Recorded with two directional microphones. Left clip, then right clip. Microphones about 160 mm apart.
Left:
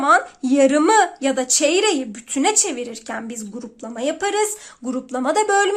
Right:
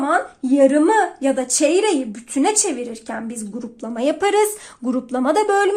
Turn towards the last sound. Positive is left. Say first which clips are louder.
# right 1 dB
turn(degrees=5)  # may be behind; listen again after turning